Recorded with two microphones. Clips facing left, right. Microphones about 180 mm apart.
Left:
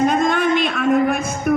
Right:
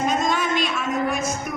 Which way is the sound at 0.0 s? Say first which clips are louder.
Left 6 dB; 55° left (ahead or behind).